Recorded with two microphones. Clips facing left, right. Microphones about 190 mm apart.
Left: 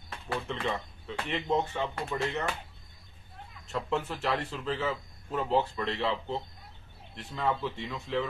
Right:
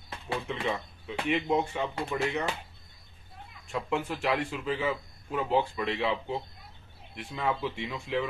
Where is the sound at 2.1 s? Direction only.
10° right (ahead or behind).